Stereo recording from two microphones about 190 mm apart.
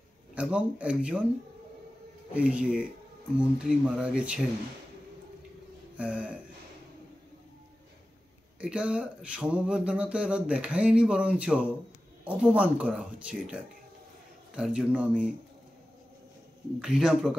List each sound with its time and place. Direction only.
0.3 s speech: 5° right (ahead or behind)
2.5 s speech: 5° right (ahead or behind)
5.9 s speech: 5° right (ahead or behind)
8.5 s speech: 5° right (ahead or behind)
16.8 s speech: 5° right (ahead or behind)